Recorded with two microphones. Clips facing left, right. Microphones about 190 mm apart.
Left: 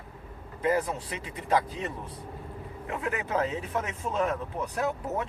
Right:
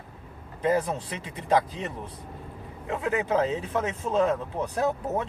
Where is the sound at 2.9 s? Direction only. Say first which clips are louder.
Right 5 dB; 25° right (ahead or behind).